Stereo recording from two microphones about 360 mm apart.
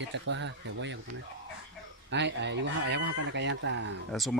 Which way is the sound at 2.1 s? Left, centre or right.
Right.